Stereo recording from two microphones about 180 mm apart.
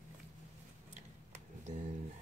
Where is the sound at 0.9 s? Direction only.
40° right (ahead or behind).